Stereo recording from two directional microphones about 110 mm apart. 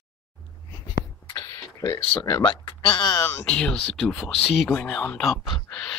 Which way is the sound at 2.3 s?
35° left (ahead or behind).